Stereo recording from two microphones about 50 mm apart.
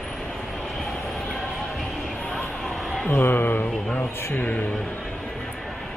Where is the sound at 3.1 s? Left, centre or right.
Left.